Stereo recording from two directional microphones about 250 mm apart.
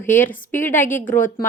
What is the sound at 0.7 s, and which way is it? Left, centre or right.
Speech, left.